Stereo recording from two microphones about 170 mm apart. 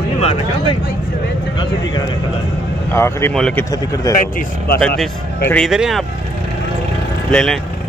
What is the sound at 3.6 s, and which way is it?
Speech, 20° left (ahead or behind).